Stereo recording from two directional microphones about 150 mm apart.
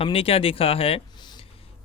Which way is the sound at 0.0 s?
40° left (ahead or behind).